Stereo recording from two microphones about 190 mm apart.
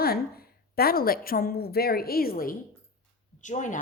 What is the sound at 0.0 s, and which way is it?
A woman's voice, 55° left (ahead or behind).